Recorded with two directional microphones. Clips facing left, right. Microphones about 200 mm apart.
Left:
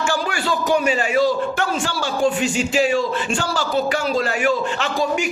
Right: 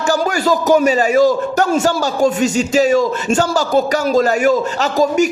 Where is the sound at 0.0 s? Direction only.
40° right (ahead or behind).